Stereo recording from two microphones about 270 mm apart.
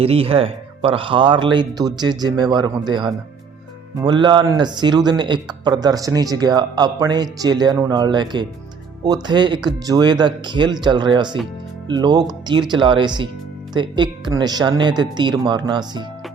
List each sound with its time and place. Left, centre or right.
0.0 s speech: right